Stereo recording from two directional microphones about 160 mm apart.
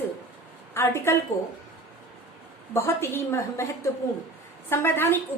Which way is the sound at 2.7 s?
15° left (ahead or behind).